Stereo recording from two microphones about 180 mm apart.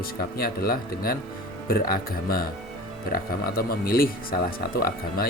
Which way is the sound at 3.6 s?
55° left (ahead or behind).